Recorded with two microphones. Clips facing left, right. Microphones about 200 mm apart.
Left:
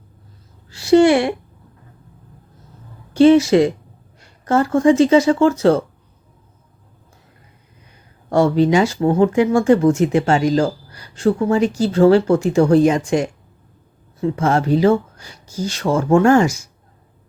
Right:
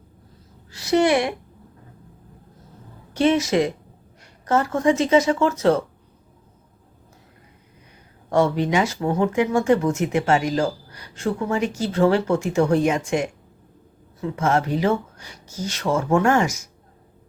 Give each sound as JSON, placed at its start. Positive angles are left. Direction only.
{"t": 0.7, "sound": "speech", "side_deg": 30}
{"t": 3.1, "sound": "speech", "side_deg": 30}
{"t": 8.3, "sound": "speech", "side_deg": 35}